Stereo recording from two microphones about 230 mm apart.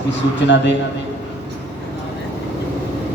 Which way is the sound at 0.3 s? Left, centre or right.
Left.